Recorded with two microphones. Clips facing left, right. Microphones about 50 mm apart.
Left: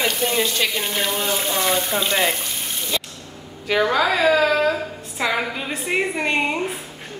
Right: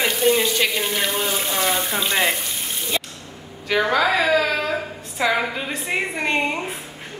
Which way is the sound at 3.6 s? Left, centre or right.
Centre.